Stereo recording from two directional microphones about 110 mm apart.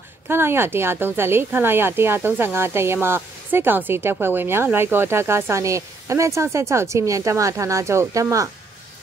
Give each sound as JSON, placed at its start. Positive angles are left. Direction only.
{"t": 0.3, "sound": "speech", "side_deg": -20}